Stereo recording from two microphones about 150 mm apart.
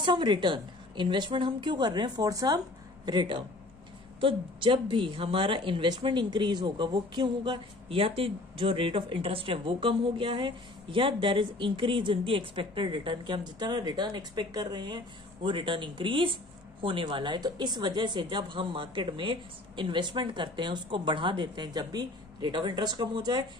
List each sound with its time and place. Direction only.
0.0 s a woman's voice: 30° right (ahead or behind)